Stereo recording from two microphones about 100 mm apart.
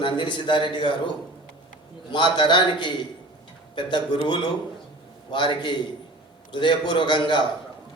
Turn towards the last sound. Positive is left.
turn(degrees=50)  # may be behind; listen again after turning